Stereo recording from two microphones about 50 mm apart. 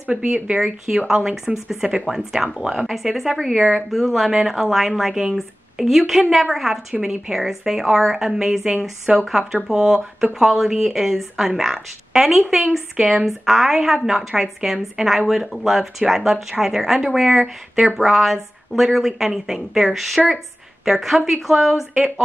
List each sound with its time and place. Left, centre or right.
0.2 s speech: right
0.8 s a woman's voice: centre